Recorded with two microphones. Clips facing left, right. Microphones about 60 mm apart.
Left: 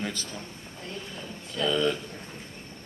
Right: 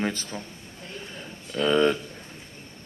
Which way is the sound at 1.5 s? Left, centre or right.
Right.